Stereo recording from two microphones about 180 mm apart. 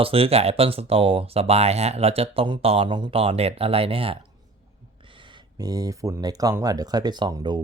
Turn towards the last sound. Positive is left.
turn(degrees=-20)  # may be behind; listen again after turning